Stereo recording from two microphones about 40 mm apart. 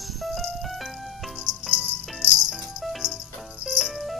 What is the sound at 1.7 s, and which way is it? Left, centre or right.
Music, right.